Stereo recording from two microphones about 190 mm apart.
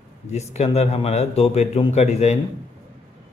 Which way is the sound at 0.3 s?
35° left (ahead or behind).